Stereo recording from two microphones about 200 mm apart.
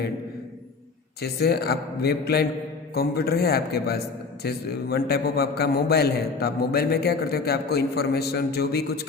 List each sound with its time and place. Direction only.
1.2 s a man's voice: 50° left (ahead or behind)